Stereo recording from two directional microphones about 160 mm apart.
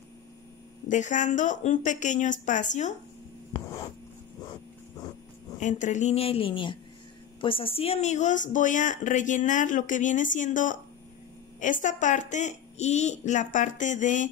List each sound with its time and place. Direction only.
0.8 s speech: 50° left (ahead or behind)
5.6 s a woman's voice: 50° left (ahead or behind)